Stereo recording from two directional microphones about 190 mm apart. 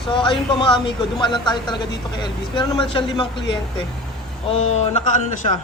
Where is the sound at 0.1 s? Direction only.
25° left (ahead or behind).